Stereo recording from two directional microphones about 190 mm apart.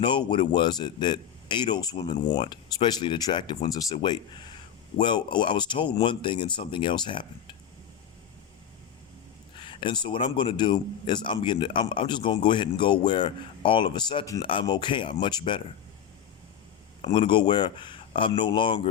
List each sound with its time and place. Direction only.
0.0 s speech: 25° left (ahead or behind)
9.6 s speech: 25° left (ahead or behind)
17.0 s speech: 25° left (ahead or behind)